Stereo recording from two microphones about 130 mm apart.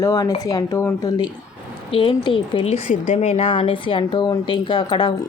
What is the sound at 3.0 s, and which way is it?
A woman's voice, 55° left (ahead or behind).